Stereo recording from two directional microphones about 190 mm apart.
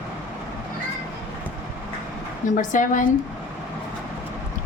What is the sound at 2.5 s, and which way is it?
Speech, 45° left (ahead or behind).